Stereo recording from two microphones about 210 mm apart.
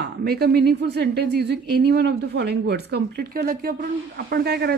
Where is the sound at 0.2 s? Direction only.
45° right (ahead or behind).